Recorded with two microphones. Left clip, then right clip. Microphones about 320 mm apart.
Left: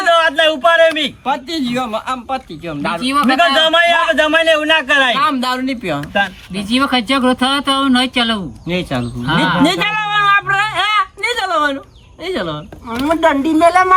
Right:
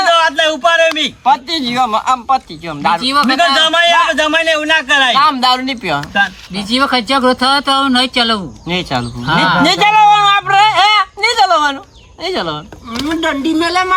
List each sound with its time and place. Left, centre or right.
0.1 s a sound: centre
1.2 s speech: centre
5.1 s speech: centre
6.1 s speech: centre
13.1 s speech: centre